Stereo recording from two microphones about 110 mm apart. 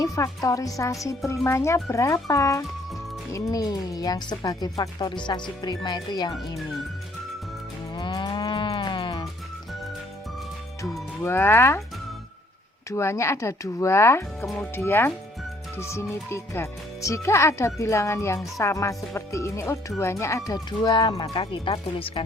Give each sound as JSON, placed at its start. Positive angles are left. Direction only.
{"t": 0.0, "sound": "speech", "side_deg": 30}
{"t": 7.9, "sound": "moo", "side_deg": 45}
{"t": 11.2, "sound": "speech", "side_deg": 20}
{"t": 12.9, "sound": "speech", "side_deg": 25}
{"t": 20.7, "sound": "speech", "side_deg": 45}